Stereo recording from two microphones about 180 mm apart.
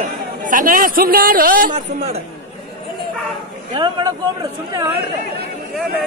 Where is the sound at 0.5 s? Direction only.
50° right (ahead or behind).